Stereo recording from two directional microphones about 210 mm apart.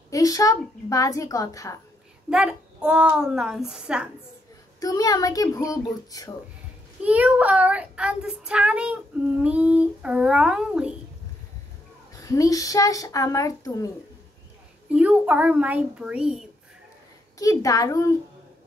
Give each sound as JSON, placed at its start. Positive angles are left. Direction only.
{"t": 0.1, "sound": "speech", "side_deg": 15}
{"t": 2.2, "sound": "child singing", "side_deg": -5}
{"t": 4.7, "sound": "speech", "side_deg": 15}
{"t": 7.0, "sound": "child singing", "side_deg": -5}
{"t": 12.1, "sound": "speech", "side_deg": 15}
{"t": 14.9, "sound": "a child's voice", "side_deg": -5}
{"t": 17.4, "sound": "speech", "side_deg": 15}